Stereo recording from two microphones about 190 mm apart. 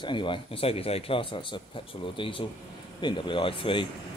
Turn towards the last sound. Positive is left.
turn(degrees=25)  # may be behind; listen again after turning